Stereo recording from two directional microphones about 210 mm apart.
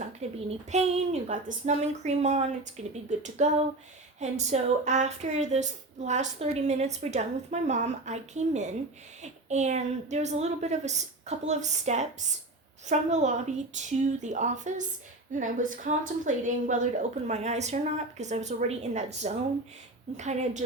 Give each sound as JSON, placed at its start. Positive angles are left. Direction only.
{"t": 0.2, "sound": "a woman's voice", "side_deg": -30}